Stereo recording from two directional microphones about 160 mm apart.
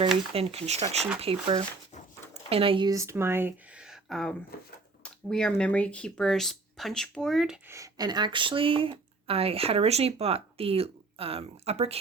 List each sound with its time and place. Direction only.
0.3 s speech: 40° right (ahead or behind); by 7.6 s centre (ahead or behind)
7.7 s speech: 20° right (ahead or behind); by 11.9 s 40° right (ahead or behind)